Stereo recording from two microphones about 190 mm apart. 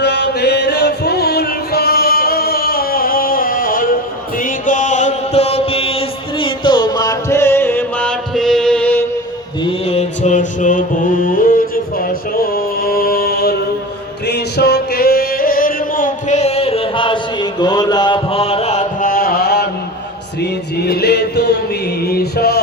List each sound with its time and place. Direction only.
0.0 s chant: 60° left (ahead or behind); by 9.0 s 10° left (ahead or behind)
9.6 s mantra: 35° left (ahead or behind); by 13.6 s 55° left (ahead or behind)
14.3 s music: 60° left (ahead or behind)
22.0 s male singing: 55° left (ahead or behind)